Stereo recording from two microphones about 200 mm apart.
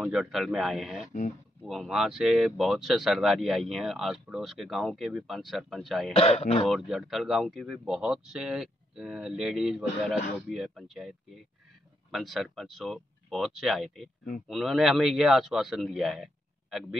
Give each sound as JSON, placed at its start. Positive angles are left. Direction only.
{"t": 0.0, "sound": "speech", "side_deg": 0}
{"t": 6.1, "sound": "speech", "side_deg": 30}
{"t": 6.7, "sound": "speech", "side_deg": 0}